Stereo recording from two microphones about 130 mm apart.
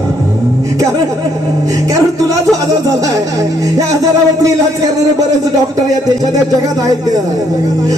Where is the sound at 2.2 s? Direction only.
25° right (ahead or behind).